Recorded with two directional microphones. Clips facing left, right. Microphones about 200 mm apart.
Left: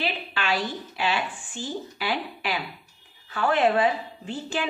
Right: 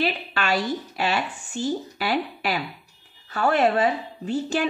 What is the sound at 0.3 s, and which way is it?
A woman's voice, 45° right (ahead or behind).